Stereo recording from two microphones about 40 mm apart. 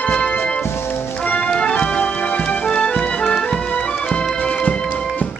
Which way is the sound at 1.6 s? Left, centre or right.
Left.